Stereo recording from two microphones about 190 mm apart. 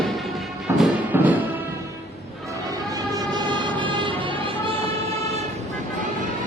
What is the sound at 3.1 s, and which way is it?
Vehicle, 25° right (ahead or behind).